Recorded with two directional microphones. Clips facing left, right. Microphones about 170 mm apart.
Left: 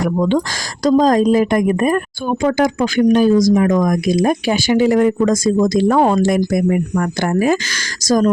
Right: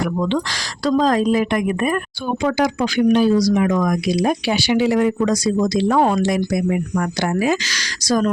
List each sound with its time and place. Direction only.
0.0 s a woman's voice: 45° left (ahead or behind)